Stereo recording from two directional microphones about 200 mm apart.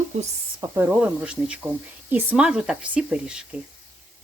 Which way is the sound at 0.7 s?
10° right (ahead or behind).